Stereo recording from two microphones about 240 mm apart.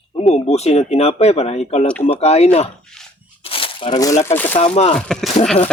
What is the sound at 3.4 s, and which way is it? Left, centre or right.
Crumpling, left.